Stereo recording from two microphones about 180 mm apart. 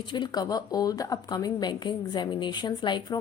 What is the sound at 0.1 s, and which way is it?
A woman's voice, 25° left (ahead or behind).